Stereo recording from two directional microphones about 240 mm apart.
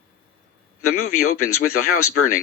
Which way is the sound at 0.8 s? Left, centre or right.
Left.